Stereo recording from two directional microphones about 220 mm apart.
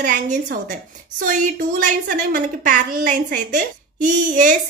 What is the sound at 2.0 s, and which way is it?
A woman's voice, 35° right (ahead or behind).